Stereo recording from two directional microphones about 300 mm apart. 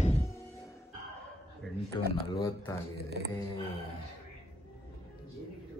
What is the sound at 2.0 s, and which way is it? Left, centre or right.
Speech, centre.